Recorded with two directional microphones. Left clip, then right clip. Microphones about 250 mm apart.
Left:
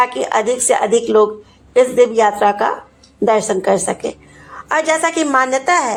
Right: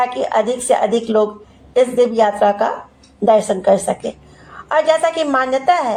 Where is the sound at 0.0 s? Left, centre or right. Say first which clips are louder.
Left 1 dB; left.